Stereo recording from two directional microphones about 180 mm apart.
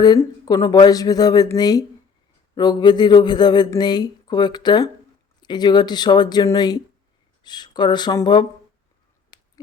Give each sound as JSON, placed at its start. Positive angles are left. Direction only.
{"t": 0.0, "sound": "speech", "side_deg": 20}